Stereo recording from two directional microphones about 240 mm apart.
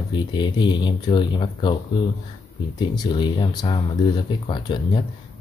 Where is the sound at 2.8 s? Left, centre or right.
Centre.